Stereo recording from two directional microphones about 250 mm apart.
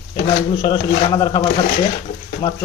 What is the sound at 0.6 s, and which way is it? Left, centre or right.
Speech, centre.